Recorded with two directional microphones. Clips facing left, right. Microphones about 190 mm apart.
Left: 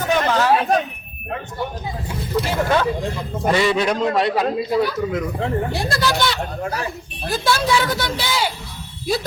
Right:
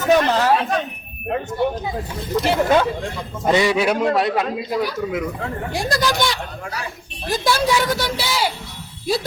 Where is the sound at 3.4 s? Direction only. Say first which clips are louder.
Right 1 dB; 15° right (ahead or behind); by 4.5 s centre (ahead or behind).